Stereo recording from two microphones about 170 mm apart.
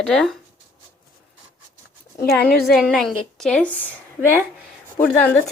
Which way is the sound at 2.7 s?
5° left (ahead or behind).